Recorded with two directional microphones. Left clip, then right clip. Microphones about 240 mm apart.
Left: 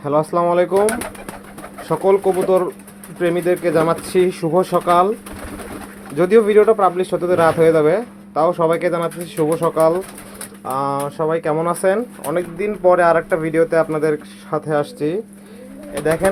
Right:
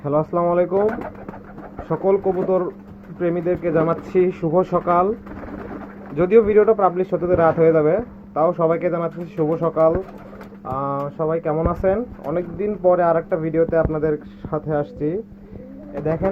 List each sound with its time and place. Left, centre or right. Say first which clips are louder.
0.0 s speech: left 3 dB; centre
1.9 s speech: left 4 dB; left
6.1 s speech: left 2 dB; left